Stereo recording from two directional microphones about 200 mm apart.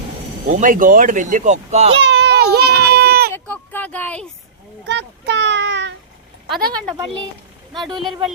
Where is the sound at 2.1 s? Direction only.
55° right (ahead or behind).